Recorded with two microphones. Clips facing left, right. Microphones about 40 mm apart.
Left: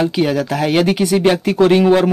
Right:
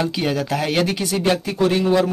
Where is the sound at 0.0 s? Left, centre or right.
Centre.